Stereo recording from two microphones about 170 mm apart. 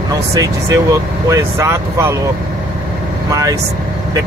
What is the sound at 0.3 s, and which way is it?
Speech, 20° right (ahead or behind).